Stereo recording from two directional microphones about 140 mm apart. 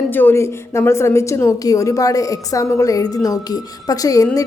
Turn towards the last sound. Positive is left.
turn(degrees=25)  # may be behind; listen again after turning